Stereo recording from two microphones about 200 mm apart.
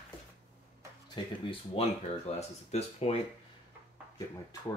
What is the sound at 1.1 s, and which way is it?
Speech, 30° left (ahead or behind).